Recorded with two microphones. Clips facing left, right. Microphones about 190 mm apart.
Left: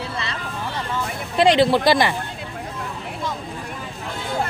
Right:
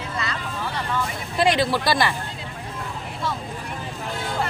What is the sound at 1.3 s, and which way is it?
Speech, 25° left (ahead or behind).